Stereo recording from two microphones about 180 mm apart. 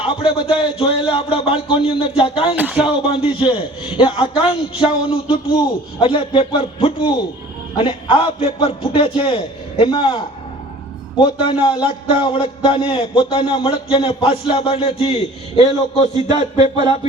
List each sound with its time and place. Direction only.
0.0 s a man's voice: 30° left (ahead or behind)
2.6 s speech: 5° right (ahead or behind)
3.2 s a man's voice: 30° left (ahead or behind)